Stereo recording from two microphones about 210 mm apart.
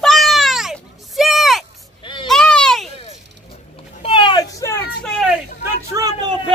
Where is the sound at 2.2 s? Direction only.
Centre (ahead or behind).